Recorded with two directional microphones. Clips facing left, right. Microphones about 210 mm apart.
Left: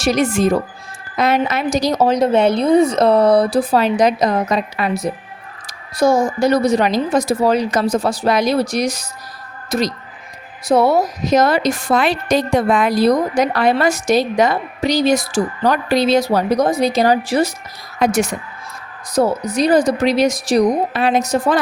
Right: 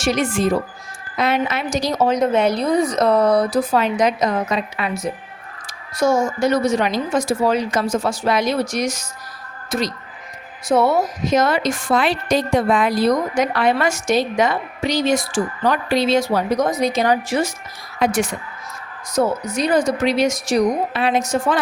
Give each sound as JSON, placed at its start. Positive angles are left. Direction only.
{"t": 0.0, "sound": "a woman's voice", "side_deg": 40}